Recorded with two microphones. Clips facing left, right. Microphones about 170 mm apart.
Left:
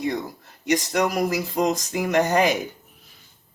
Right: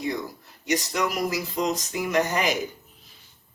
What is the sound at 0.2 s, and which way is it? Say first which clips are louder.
Speech: left 2 dB; 55° left (ahead or behind).